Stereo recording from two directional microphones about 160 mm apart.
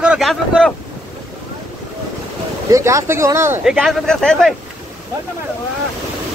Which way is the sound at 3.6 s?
5° right (ahead or behind).